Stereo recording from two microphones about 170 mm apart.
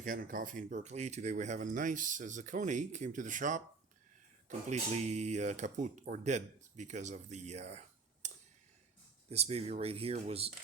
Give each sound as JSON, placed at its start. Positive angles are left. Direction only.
{"t": 0.0, "sound": "speech", "side_deg": -50}
{"t": 9.3, "sound": "speech", "side_deg": -40}